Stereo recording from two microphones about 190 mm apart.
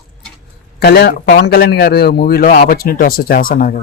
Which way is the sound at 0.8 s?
60° left (ahead or behind).